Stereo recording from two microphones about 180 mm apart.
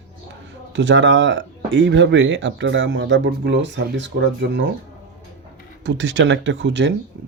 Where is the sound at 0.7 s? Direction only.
90° right.